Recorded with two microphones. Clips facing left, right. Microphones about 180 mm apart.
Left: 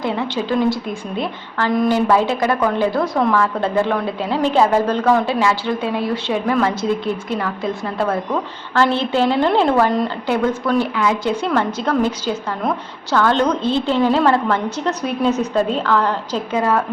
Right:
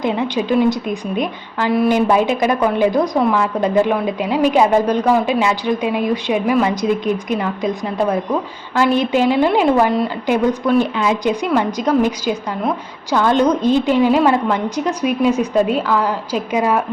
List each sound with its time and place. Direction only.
0.0 s a woman's voice: 20° right (ahead or behind)